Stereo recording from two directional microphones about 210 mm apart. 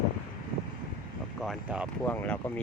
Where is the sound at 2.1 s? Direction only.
10° left (ahead or behind).